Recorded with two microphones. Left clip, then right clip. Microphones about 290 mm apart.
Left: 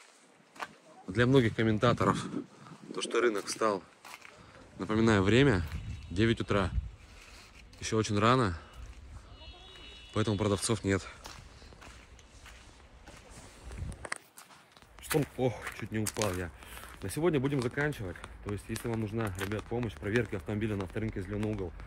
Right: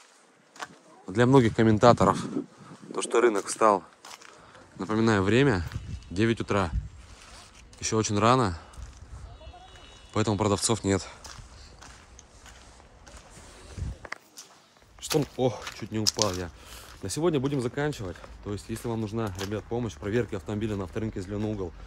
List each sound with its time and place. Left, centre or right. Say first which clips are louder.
1.1 s speech: right 5 dB; centre
2.0 s speech: right 6 dB; centre
4.7 s speech: right 3 dB; centre
7.8 s speech: right 4 dB; centre
10.1 s speech: right 5 dB; centre
15.0 s speech: right 5 dB; centre